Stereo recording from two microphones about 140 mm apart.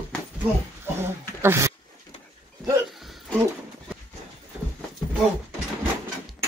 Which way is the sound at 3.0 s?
Centre (ahead or behind).